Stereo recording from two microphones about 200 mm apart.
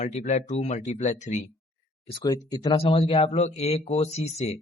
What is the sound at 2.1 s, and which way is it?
A man's voice, 20° left (ahead or behind).